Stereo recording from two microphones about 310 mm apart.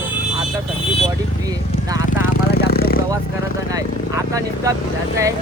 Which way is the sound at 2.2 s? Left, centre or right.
Left.